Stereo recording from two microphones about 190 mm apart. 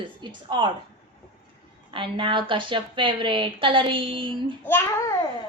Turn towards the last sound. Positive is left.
turn(degrees=10)  # may be behind; listen again after turning